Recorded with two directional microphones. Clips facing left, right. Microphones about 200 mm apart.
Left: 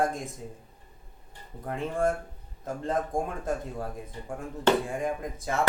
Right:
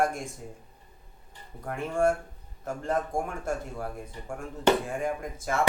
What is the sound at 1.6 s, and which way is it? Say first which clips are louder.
A man's voice: right 2 dB; 15° left (ahead or behind).